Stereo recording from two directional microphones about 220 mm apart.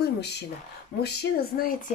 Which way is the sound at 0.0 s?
50° left (ahead or behind).